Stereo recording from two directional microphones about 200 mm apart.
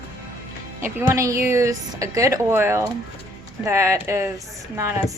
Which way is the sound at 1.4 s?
15° right (ahead or behind).